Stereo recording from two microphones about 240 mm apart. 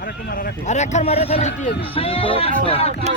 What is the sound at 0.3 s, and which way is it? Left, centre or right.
Speech, left.